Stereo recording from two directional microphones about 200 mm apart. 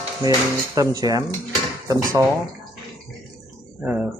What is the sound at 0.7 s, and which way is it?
Speech, 20° right (ahead or behind).